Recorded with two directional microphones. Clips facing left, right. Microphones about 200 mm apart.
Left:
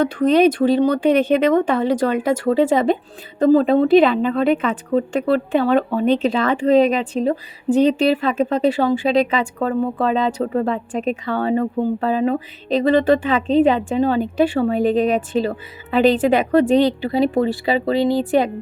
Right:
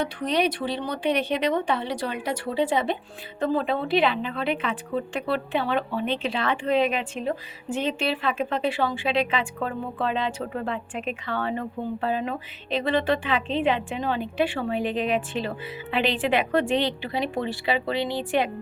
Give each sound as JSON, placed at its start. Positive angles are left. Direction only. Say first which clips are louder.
{"t": 0.0, "sound": "a woman's voice", "louder": "left 10 dB", "side_deg": 50}